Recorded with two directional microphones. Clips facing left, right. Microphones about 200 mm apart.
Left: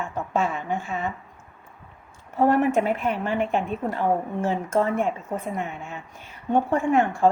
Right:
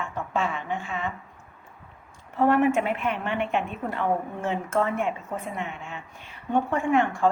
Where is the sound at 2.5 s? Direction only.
40° left (ahead or behind).